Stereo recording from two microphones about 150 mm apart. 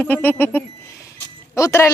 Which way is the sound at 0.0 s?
10° left (ahead or behind).